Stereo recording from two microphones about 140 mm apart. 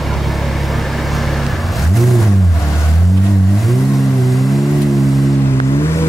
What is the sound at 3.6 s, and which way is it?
Vehicle, centre (ahead or behind).